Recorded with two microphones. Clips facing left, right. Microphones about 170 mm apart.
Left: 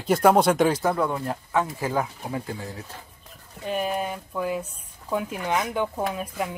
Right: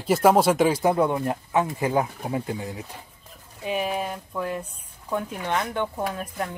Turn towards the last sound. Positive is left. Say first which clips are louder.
# left 1 dB
turn(degrees=10)  # may be behind; listen again after turning